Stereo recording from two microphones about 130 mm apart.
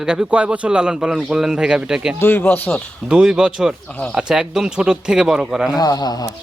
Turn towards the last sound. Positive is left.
turn(degrees=30)  # may be behind; listen again after turning